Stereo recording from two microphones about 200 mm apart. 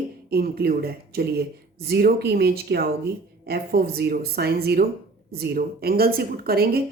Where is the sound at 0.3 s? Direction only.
50° right (ahead or behind).